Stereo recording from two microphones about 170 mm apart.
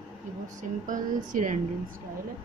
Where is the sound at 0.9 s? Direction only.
50° right (ahead or behind).